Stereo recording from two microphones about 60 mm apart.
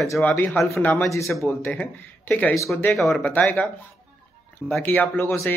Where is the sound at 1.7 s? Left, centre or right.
Left.